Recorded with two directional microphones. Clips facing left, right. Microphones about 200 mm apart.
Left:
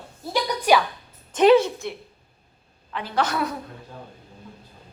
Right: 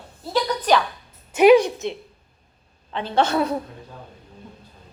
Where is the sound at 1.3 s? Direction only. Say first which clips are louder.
Right 2 dB; 15° right (ahead or behind).